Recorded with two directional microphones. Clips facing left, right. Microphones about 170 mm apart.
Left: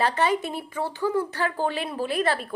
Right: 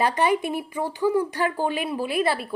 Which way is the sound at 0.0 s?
10° right (ahead or behind).